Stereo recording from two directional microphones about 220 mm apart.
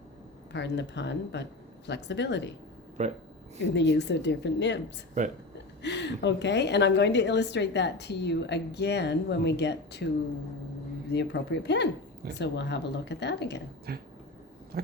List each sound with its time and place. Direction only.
0.5 s a woman's voice: 55° left (ahead or behind)
3.0 s speech: 30° right (ahead or behind)
3.8 s a woman's voice: 50° left (ahead or behind)
5.8 s a woman's voice: 50° left (ahead or behind)
11.1 s a woman's voice: 50° left (ahead or behind)